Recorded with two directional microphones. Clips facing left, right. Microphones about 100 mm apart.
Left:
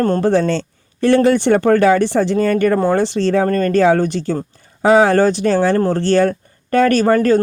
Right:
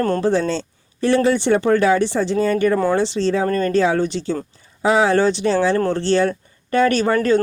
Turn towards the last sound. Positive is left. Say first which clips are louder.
# left 4 dB
turn(degrees=40)  # may be behind; listen again after turning